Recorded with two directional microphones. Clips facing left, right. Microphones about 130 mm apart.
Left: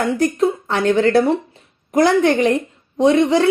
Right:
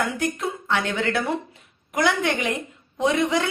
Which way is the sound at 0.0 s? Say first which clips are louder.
Left 9 dB; 35° left (ahead or behind).